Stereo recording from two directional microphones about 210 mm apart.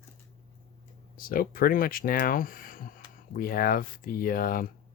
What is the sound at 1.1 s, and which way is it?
Speech, 45° left (ahead or behind).